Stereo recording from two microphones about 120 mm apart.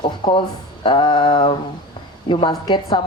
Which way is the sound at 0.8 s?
45° left (ahead or behind).